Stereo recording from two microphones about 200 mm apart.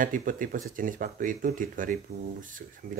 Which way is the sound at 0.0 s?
40° right (ahead or behind).